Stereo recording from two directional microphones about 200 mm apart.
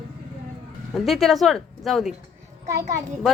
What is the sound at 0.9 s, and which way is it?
Speech, centre (ahead or behind).